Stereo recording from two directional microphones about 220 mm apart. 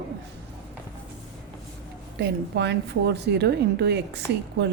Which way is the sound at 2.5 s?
50° right (ahead or behind).